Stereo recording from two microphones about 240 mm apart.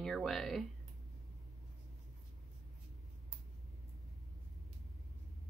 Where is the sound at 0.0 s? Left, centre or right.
Centre.